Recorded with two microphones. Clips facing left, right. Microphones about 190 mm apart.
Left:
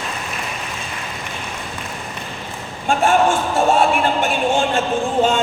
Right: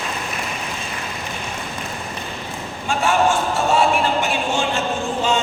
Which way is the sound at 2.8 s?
55° left (ahead or behind).